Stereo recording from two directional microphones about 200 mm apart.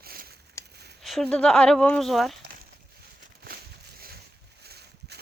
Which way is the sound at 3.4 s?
50° right (ahead or behind).